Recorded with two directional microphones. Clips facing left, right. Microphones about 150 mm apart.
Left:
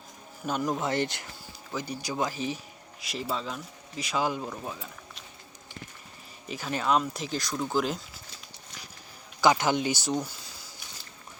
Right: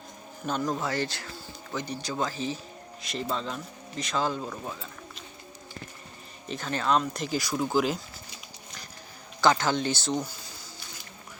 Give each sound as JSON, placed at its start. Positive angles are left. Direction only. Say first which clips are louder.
{"t": 0.4, "sound": "speech", "louder": "even", "side_deg": 10}
{"t": 1.7, "sound": "speech", "louder": "even", "side_deg": 10}
{"t": 6.5, "sound": "speech", "louder": "even", "side_deg": 10}
{"t": 9.4, "sound": "speech", "louder": "even", "side_deg": 15}